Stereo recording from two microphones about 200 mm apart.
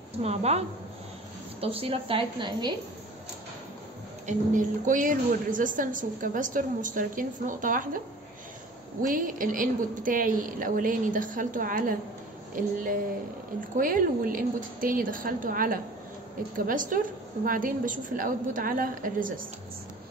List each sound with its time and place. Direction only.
0.2 s a woman's voice: 30° right (ahead or behind)
4.3 s a woman's voice: 40° right (ahead or behind)
9.0 s a woman's voice: 45° right (ahead or behind)